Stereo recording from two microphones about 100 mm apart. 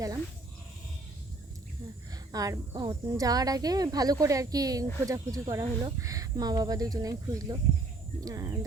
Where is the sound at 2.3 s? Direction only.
35° right (ahead or behind).